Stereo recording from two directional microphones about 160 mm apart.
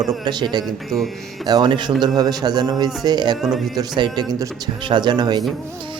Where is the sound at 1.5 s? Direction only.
30° right (ahead or behind).